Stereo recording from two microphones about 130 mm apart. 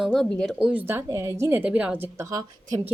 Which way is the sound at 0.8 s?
15° right (ahead or behind).